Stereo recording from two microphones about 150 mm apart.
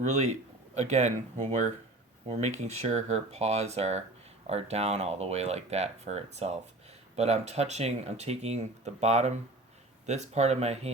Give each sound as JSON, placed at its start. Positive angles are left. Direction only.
{"t": 0.0, "sound": "a man's voice", "side_deg": -50}
{"t": 2.2, "sound": "speech", "side_deg": -50}